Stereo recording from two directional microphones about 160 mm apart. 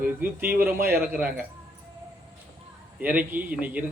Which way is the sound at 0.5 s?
65° right (ahead or behind).